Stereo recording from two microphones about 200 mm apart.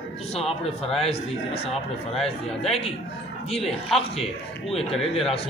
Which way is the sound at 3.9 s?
30° left (ahead or behind).